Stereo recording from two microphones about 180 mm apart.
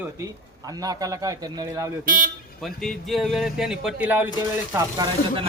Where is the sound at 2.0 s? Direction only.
50° right (ahead or behind).